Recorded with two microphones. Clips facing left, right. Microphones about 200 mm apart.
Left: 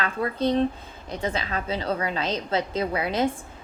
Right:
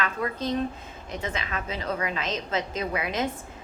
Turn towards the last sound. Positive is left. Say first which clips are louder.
# left 4 dB
turn(degrees=30)  # may be behind; listen again after turning